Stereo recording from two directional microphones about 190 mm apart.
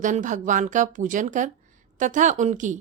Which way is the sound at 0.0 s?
40° right (ahead or behind).